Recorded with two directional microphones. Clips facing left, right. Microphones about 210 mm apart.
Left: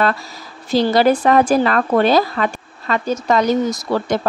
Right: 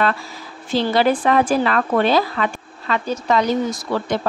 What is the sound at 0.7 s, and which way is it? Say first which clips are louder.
Speech: left 3 dB; 40° left (ahead or behind).